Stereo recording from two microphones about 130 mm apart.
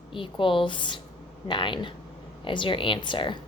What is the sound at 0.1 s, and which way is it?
A woman's voice, 40° left (ahead or behind).